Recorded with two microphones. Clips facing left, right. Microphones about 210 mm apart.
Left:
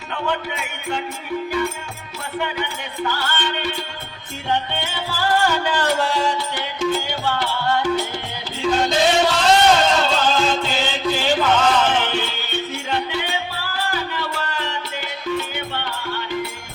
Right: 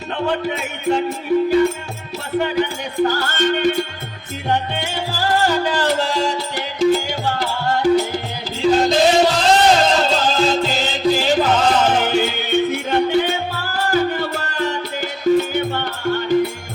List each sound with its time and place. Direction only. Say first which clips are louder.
0.3 s music: right 3 dB; 35° right (ahead or behind)
2.4 s music: right 6 dB; 40° right (ahead or behind)